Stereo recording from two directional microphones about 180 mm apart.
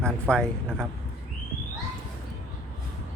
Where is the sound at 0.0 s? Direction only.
5° left (ahead or behind).